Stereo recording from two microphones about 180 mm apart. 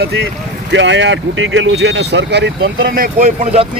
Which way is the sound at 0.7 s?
85° right.